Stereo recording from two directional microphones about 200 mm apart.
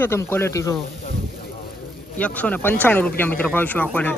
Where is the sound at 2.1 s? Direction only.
5° left (ahead or behind).